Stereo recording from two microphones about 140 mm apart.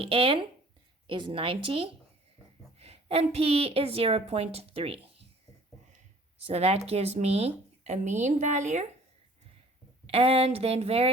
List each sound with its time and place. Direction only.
0.0 s a woman's voice: 40° right (ahead or behind)
6.4 s speech: 45° right (ahead or behind)
10.1 s speech: 45° right (ahead or behind)